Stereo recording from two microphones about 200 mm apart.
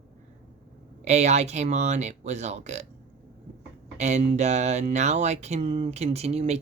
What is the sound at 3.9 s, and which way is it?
Speech, 35° right (ahead or behind).